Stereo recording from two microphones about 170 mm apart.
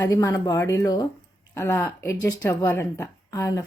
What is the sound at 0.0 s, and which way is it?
Speech, 20° left (ahead or behind).